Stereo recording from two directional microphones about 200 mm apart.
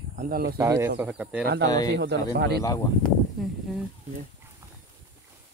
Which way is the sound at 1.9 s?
55° right (ahead or behind).